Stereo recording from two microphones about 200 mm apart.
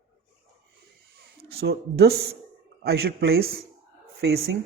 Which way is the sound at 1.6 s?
55° right (ahead or behind).